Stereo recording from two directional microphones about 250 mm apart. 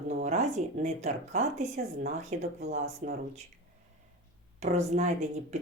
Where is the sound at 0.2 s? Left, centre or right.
Right.